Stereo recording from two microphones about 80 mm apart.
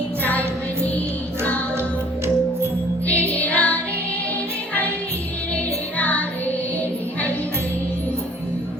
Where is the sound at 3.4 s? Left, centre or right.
Centre.